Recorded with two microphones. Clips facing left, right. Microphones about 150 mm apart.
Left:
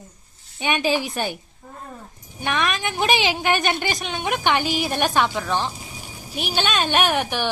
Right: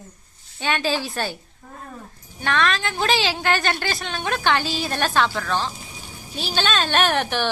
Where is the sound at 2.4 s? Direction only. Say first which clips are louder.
Right 1 dB; 15° left (ahead or behind).